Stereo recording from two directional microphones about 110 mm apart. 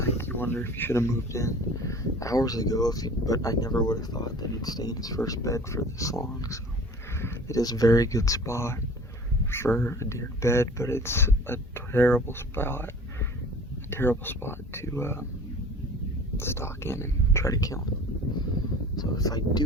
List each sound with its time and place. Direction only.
0.0 s speech: 20° left (ahead or behind)
16.4 s speech: 25° left (ahead or behind)
18.9 s speech: 35° left (ahead or behind)